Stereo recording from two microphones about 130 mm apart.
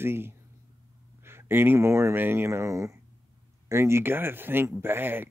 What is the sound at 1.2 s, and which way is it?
Speech, 20° right (ahead or behind).